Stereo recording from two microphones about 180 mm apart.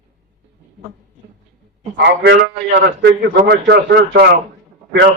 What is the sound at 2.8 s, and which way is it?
A man's voice, 65° right (ahead or behind).